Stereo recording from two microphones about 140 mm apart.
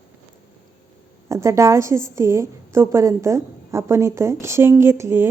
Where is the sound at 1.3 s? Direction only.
20° right (ahead or behind).